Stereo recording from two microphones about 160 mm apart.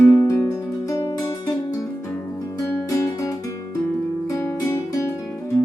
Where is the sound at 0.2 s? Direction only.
20° left (ahead or behind).